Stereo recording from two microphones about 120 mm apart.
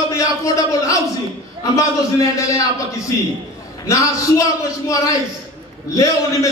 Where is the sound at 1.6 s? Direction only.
30° left (ahead or behind).